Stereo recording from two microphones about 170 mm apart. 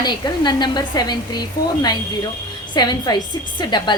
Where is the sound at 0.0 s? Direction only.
25° left (ahead or behind).